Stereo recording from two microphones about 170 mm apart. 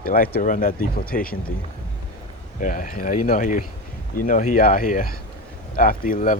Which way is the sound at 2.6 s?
55° left (ahead or behind).